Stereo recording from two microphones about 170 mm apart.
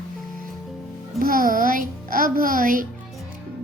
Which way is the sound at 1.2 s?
55° right (ahead or behind).